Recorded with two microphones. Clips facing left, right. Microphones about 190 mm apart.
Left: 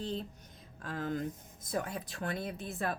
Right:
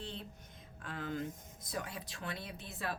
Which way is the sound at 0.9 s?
40° left (ahead or behind).